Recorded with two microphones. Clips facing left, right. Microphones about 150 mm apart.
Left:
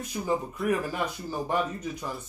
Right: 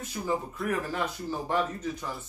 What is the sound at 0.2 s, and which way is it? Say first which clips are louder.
Speech: left 2 dB; 10° left (ahead or behind).